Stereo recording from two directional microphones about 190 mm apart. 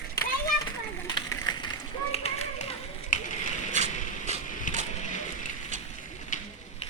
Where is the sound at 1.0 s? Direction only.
20° left (ahead or behind).